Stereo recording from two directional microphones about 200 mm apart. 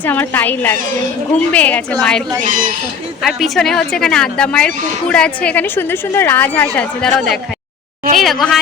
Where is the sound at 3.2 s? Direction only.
Centre (ahead or behind).